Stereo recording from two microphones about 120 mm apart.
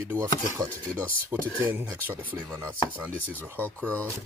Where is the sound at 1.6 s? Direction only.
15° right (ahead or behind).